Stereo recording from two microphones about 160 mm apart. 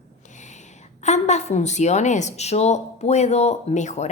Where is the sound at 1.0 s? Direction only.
45° left (ahead or behind).